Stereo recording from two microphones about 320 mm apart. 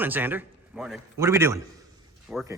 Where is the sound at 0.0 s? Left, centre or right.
Centre.